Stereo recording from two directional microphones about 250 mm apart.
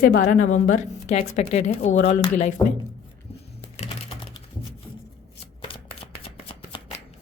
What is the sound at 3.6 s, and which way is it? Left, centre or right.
Typing, left.